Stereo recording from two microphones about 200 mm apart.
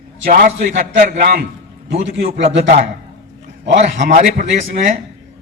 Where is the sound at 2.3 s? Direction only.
65° right (ahead or behind).